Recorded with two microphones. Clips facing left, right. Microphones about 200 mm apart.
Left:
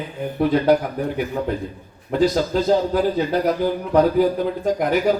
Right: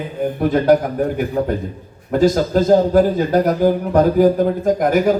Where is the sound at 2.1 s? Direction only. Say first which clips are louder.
Right 3 dB; 45° right (ahead or behind).